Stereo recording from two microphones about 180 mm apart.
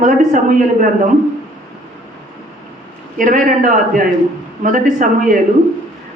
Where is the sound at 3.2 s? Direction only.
45° right (ahead or behind).